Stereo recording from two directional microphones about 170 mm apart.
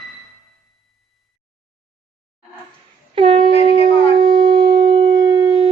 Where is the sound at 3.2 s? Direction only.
30° right (ahead or behind).